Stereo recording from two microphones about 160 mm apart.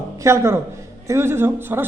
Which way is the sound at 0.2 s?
15° right (ahead or behind).